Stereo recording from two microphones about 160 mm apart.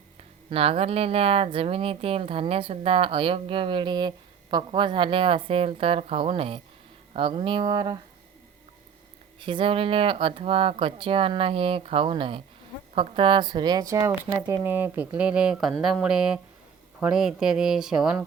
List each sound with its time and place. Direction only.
0.5 s speech: 35° right (ahead or behind)
9.4 s speech: 30° right (ahead or behind)
14.4 s speech: 10° right (ahead or behind)